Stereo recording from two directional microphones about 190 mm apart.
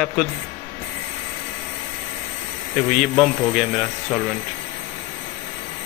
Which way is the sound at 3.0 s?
Centre (ahead or behind).